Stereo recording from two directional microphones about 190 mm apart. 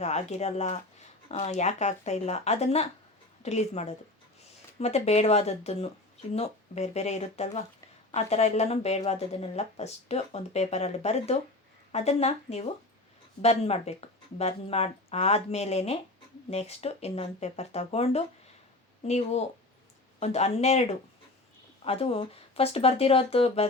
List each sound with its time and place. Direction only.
0.0 s speech: 35° left (ahead or behind)